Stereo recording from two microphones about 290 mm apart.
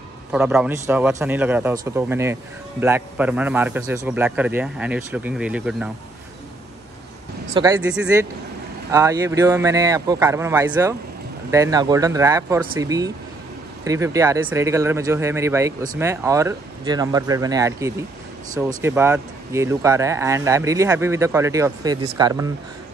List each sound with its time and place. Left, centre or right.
0.3 s a man's voice: centre
7.5 s speech: centre